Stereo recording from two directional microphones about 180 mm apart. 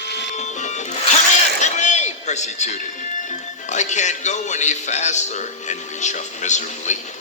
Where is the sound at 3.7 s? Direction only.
40° left (ahead or behind).